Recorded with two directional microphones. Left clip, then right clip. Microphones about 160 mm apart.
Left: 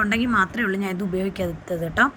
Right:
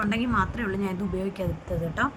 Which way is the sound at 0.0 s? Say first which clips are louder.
Left 6 dB; 20° left (ahead or behind).